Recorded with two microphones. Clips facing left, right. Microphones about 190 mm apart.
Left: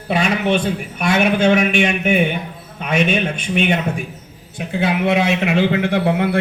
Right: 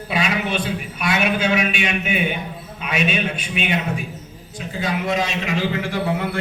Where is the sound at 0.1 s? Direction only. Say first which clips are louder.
Left 5 dB; 50° left (ahead or behind).